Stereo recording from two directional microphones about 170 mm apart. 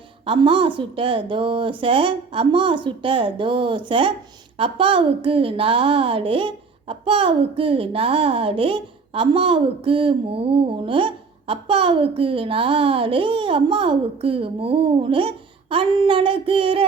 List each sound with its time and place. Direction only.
0.3 s a woman's voice: 30° right (ahead or behind)